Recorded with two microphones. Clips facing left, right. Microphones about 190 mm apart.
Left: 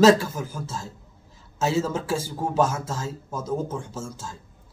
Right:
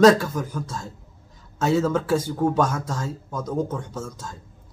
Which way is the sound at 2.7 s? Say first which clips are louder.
Right 2 dB; 25° left (ahead or behind).